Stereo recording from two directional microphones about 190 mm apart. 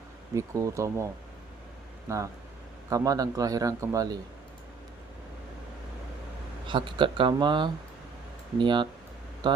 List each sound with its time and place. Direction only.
0.3 s a man's voice: 15° right (ahead or behind)
2.0 s a man's voice: 15° right (ahead or behind)
6.7 s speech: 25° right (ahead or behind)